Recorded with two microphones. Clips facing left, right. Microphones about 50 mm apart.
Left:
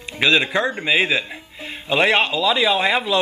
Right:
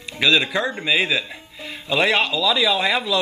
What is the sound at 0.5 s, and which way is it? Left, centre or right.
Speech, centre.